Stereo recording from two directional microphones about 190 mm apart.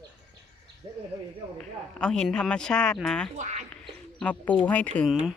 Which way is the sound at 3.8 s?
5° left (ahead or behind).